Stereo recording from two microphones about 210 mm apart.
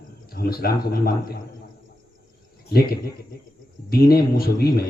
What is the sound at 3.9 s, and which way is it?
Speech, 45° left (ahead or behind).